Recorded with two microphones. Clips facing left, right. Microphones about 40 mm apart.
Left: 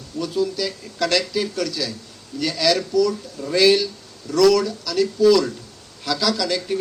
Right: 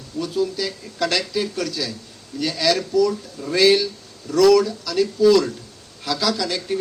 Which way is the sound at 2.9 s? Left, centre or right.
Centre.